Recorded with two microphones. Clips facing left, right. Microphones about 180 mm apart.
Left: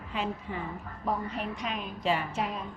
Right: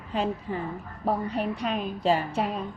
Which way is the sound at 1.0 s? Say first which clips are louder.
Right 5 dB; 35° right (ahead or behind).